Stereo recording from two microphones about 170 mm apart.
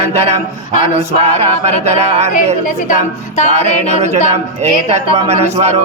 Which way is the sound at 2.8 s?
45° left (ahead or behind).